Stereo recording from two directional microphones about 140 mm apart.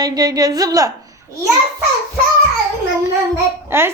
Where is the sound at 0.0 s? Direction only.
25° right (ahead or behind).